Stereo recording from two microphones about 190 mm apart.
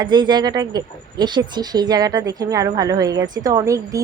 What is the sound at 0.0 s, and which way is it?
A woman's voice, 25° right (ahead or behind).